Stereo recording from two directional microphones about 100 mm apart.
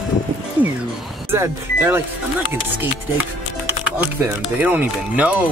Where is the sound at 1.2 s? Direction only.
25° right (ahead or behind).